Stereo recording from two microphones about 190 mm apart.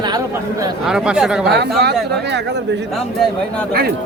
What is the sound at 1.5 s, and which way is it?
Speech, 60° right (ahead or behind).